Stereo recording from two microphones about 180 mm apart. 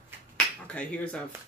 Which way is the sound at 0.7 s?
5° left (ahead or behind).